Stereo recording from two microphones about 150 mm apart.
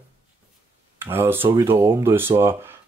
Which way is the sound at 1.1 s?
15° right (ahead or behind).